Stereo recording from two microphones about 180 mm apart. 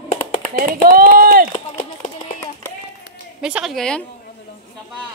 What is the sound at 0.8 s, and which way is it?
Speech, 55° right (ahead or behind).